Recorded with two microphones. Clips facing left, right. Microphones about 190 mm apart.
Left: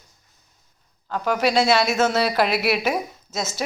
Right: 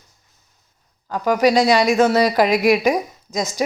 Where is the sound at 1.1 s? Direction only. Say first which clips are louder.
Right 5 dB; 10° right (ahead or behind).